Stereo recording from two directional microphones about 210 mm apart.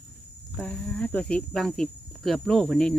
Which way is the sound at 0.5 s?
5° left (ahead or behind).